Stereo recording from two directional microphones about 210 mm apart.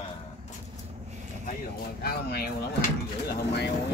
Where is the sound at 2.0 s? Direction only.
50° left (ahead or behind).